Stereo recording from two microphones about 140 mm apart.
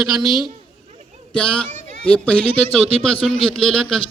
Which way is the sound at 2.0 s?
10° left (ahead or behind).